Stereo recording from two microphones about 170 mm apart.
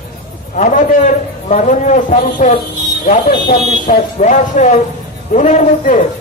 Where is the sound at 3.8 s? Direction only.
45° left (ahead or behind).